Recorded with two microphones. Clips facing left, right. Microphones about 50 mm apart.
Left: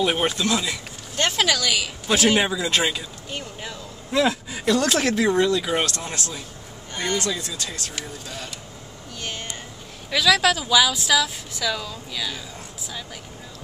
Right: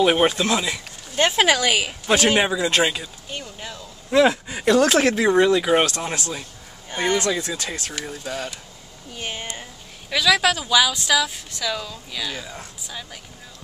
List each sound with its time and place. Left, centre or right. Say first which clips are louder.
0.0 s speech: right 4 dB; centre
2.1 s speech: right 1 dB; centre
3.3 s speech: even; centre
4.1 s speech: right 4 dB; centre
8.0 s speech: right 5 dB; right
9.1 s a sound: right 2 dB; centre
10.0 s speech: even; centre